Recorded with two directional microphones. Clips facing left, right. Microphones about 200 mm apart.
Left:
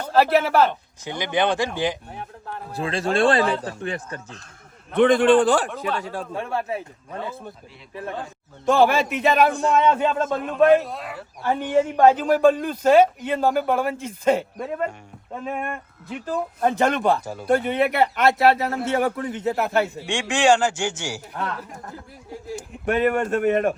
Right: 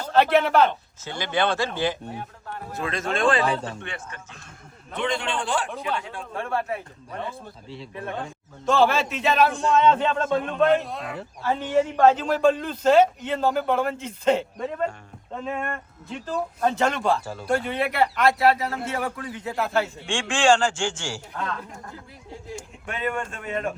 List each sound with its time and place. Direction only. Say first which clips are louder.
0.1 s a man's voice: left 1 dB; 5° left (ahead or behind)
1.0 s a man's voice: left 2 dB; 15° left (ahead or behind)
2.7 s speech: left 5 dB; 30° left (ahead or behind)
4.9 s a man's voice: left 12 dB; 55° left (ahead or behind)
6.3 s speech: right 1 dB; 20° left (ahead or behind)
8.6 s a man's voice: left 3 dB; 15° left (ahead or behind)
11.4 s a man's voice: left 2 dB; 15° left (ahead or behind)
22.3 s a man's voice: left 4 dB; 5° left (ahead or behind)
22.9 s a man's voice: left 9 dB; 65° left (ahead or behind)